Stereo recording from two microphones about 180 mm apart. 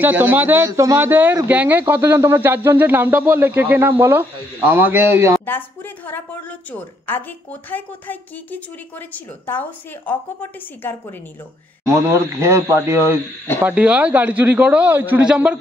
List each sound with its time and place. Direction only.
0.0 s speech: 10° right (ahead or behind)
6.7 s a woman's voice: 10° left (ahead or behind)
11.8 s speech: 15° right (ahead or behind)